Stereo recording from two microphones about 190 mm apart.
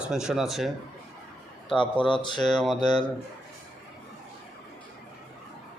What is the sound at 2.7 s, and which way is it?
Speech, 25° left (ahead or behind).